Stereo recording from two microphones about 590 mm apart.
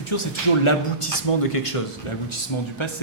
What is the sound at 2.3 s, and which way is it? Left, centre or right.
Speech, left.